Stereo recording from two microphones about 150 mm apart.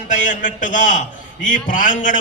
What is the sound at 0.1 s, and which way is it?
A man's voice, 60° left (ahead or behind).